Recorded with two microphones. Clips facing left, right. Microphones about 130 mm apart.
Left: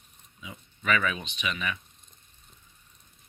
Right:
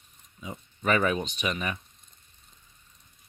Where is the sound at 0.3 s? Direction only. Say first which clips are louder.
Right 5 dB; 40° right (ahead or behind).